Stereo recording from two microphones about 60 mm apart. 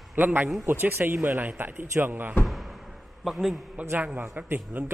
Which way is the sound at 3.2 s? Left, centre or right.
Centre.